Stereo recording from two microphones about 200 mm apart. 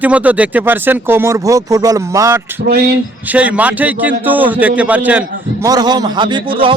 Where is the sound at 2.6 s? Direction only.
55° right (ahead or behind).